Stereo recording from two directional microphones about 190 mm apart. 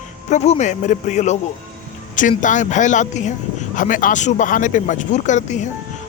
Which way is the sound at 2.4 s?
40° left (ahead or behind).